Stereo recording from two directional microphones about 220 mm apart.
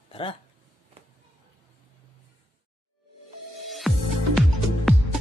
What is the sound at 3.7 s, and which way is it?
Music, centre (ahead or behind).